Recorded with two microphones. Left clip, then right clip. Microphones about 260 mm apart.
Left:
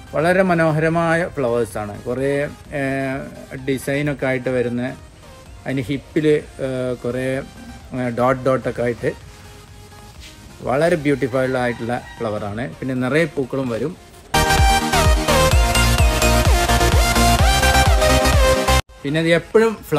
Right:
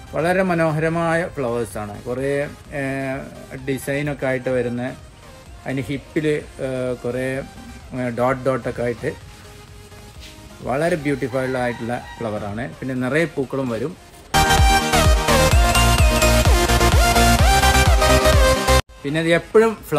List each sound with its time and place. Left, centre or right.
0.1 s speech: centre
10.6 s speech: centre
14.3 s music: centre